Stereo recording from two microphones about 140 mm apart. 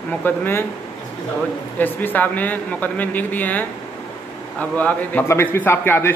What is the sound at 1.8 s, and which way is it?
A man's voice, 10° left (ahead or behind).